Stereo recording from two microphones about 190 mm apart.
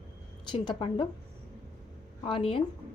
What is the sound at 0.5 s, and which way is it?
Speech, 25° left (ahead or behind).